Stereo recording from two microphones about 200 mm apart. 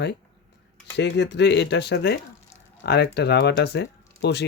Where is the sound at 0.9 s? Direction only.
60° left (ahead or behind).